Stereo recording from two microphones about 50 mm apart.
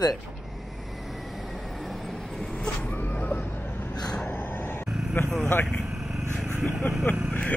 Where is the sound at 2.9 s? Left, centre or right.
Left.